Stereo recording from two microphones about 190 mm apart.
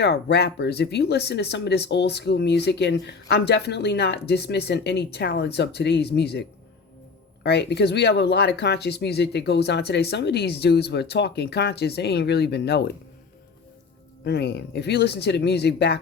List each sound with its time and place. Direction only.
0.0 s speech: 60° left (ahead or behind)
7.4 s speech: 60° left (ahead or behind)
14.3 s speech: 60° left (ahead or behind)